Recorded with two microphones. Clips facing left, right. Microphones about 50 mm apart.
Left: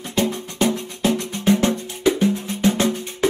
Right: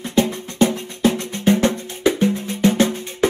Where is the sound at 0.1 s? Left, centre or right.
Right.